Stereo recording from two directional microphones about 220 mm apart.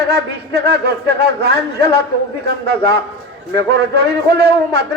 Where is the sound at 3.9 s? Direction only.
45° right (ahead or behind).